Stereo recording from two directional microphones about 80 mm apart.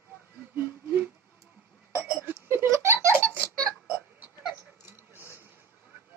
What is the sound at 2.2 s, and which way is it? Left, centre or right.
Giggle, right.